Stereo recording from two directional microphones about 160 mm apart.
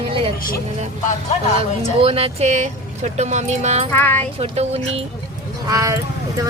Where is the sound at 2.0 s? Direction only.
40° right (ahead or behind).